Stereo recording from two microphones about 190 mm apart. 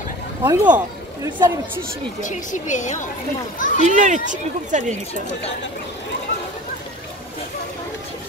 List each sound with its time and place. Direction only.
0.4 s speech: 10° right (ahead or behind)
2.2 s speech: 40° left (ahead or behind)
3.8 s speech: 40° right (ahead or behind)